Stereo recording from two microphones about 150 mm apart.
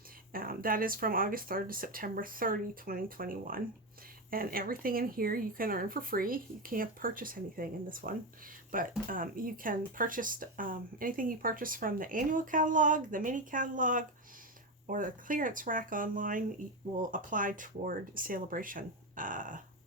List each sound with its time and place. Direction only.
0.3 s speech: 70° right (ahead or behind)